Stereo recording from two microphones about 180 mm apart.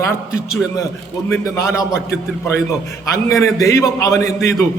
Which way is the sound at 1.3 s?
15° left (ahead or behind).